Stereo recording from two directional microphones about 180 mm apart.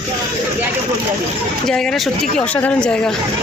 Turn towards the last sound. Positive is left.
turn(degrees=5)  # may be behind; listen again after turning